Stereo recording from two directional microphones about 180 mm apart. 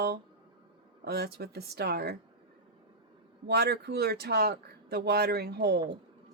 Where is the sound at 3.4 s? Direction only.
65° right (ahead or behind).